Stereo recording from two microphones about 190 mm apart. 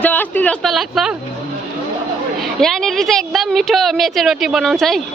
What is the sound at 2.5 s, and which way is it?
A woman's voice, centre (ahead or behind).